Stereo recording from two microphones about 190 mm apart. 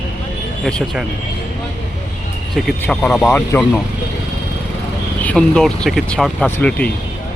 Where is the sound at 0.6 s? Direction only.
Centre (ahead or behind).